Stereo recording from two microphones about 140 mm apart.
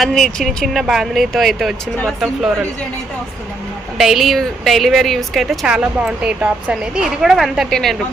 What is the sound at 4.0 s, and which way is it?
Speech, centre (ahead or behind).